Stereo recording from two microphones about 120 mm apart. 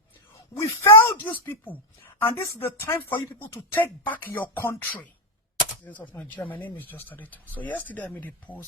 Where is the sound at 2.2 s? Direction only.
15° left (ahead or behind).